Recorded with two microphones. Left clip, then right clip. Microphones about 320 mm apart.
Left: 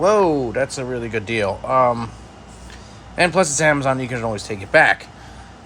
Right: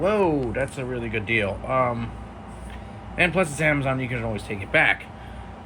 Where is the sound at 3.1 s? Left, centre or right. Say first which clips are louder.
Left 5 dB; centre.